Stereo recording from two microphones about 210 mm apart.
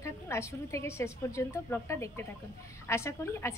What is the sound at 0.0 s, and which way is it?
A woman's voice, 15° left (ahead or behind).